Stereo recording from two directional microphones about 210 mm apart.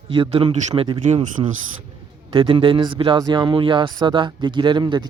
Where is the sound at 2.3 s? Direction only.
25° right (ahead or behind).